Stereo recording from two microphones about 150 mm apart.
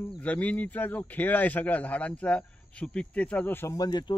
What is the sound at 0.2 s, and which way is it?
Speech, 10° left (ahead or behind).